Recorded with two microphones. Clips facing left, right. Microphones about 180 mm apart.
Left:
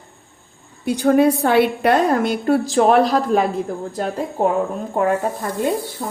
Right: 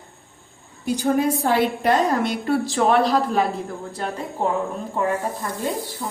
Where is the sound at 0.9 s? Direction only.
65° left (ahead or behind); by 3.4 s 50° left (ahead or behind).